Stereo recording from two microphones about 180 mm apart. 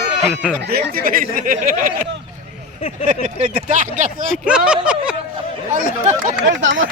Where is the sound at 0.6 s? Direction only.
60° right (ahead or behind).